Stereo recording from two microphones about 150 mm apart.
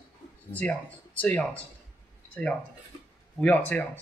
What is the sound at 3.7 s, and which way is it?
Speech, 10° left (ahead or behind).